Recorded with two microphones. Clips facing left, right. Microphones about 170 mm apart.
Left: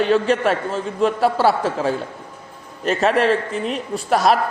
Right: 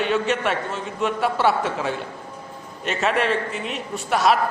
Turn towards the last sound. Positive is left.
turn(degrees=40)  # may be behind; listen again after turning